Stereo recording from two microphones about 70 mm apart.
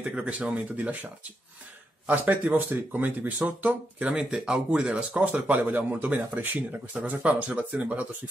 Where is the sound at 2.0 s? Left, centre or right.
Right.